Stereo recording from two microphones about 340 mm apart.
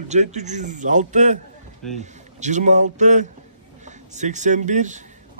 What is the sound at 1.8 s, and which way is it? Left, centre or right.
Speech, centre.